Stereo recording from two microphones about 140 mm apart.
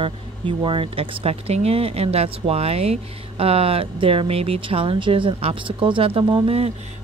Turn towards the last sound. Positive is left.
turn(degrees=-45)  # may be behind; listen again after turning